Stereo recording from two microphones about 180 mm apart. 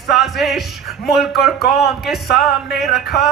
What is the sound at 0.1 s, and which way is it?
Music, centre (ahead or behind).